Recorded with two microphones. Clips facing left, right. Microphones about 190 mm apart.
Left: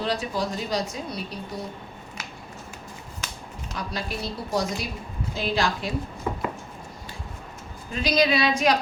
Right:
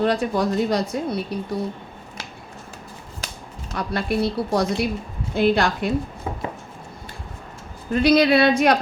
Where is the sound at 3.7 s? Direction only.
60° right (ahead or behind).